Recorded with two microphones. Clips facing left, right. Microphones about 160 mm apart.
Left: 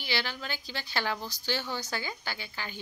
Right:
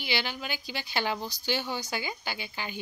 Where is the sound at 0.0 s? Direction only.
15° right (ahead or behind).